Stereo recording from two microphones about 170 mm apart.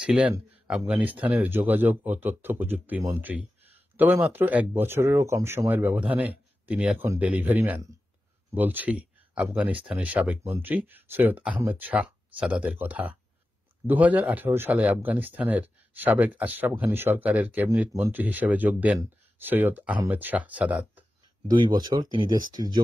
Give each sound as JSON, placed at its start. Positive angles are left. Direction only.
{"t": 0.0, "sound": "speech", "side_deg": -5}
{"t": 21.5, "sound": "speech", "side_deg": -25}